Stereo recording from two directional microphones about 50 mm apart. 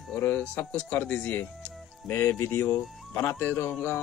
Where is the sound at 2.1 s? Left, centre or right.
Left.